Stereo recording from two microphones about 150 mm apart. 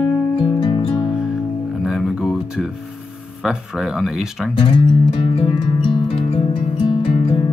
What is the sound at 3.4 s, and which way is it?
Speech, 5° right (ahead or behind).